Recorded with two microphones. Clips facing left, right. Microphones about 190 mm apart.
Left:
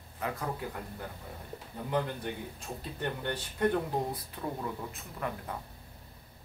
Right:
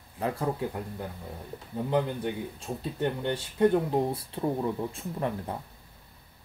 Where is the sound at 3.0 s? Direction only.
20° right (ahead or behind).